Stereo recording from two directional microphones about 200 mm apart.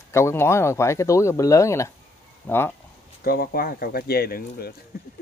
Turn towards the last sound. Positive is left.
turn(degrees=50)  # may be behind; listen again after turning